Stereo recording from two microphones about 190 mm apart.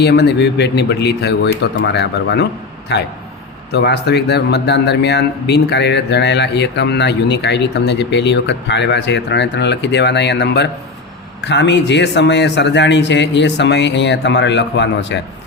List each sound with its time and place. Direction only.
0.0 s a man's voice: 60° left (ahead or behind)